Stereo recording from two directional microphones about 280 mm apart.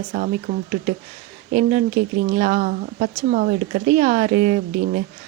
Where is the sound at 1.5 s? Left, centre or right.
Right.